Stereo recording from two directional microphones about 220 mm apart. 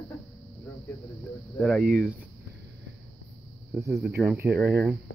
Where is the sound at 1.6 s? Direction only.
Centre (ahead or behind).